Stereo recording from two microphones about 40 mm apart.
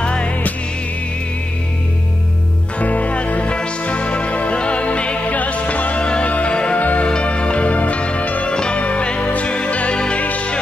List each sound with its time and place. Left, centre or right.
0.0 s music: left
2.8 s music: left
6.0 s music: left
6.8 s music: left
7.1 s music: left
8.5 s music: left